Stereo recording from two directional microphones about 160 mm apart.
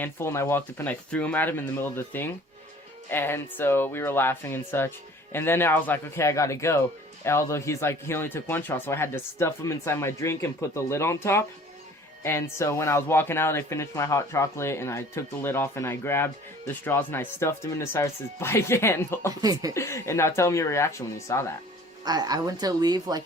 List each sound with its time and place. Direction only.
0.0 s speech: 15° left (ahead or behind)
19.4 s speech: 25° right (ahead or behind)
19.7 s speech: 20° left (ahead or behind)
22.0 s speech: 25° right (ahead or behind)